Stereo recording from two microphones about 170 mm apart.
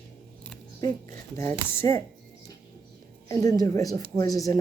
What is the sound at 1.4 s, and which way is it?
Speech, 15° left (ahead or behind).